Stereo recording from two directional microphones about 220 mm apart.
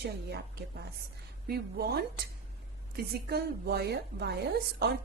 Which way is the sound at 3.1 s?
45° right (ahead or behind).